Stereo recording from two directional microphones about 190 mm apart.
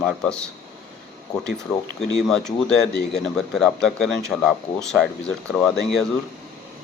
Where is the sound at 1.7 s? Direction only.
5° left (ahead or behind).